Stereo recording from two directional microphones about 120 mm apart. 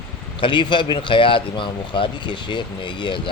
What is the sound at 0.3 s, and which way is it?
Speech, 45° left (ahead or behind).